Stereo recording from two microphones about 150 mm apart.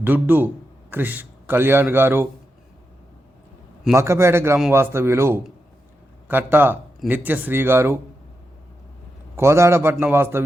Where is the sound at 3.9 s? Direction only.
20° right (ahead or behind).